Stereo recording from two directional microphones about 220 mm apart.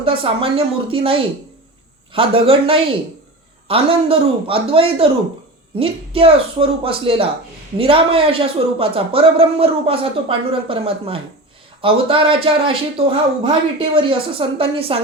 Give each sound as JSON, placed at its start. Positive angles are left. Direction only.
{"t": 0.0, "sound": "a man's voice", "side_deg": -25}